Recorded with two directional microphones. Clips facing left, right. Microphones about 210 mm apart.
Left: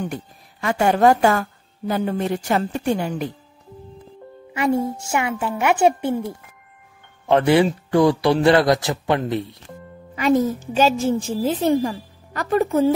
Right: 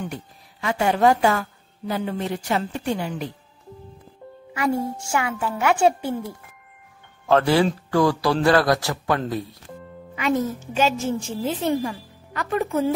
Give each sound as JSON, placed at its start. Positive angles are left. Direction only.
{"t": 0.0, "sound": "a woman's voice", "side_deg": 50}
{"t": 4.6, "sound": "a woman's voice", "side_deg": 20}
{"t": 10.1, "sound": "a woman's voice", "side_deg": 35}